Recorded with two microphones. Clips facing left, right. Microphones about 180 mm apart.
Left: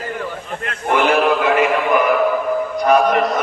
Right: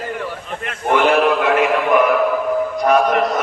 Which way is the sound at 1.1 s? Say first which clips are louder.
Even; centre (ahead or behind).